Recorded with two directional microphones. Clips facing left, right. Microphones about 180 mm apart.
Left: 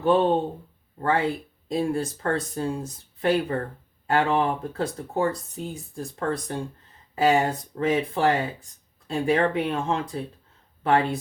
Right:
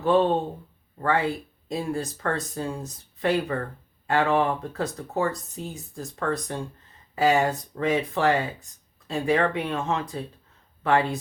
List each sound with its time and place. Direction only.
0.0 s speech: 25° left (ahead or behind)